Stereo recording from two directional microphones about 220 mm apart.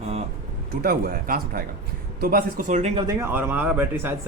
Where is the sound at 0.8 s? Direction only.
40° right (ahead or behind).